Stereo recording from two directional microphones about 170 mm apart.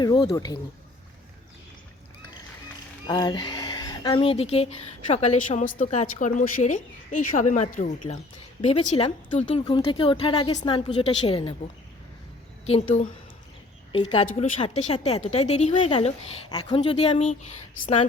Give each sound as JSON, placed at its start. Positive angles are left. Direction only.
{"t": 0.0, "sound": "speech", "side_deg": 25}
{"t": 3.1, "sound": "speech", "side_deg": 25}
{"t": 4.2, "sound": "a woman's voice", "side_deg": 35}
{"t": 12.6, "sound": "speech", "side_deg": 40}
{"t": 15.9, "sound": "speech", "side_deg": 30}